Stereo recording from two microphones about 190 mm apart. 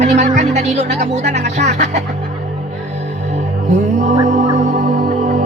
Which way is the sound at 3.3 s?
35° right (ahead or behind).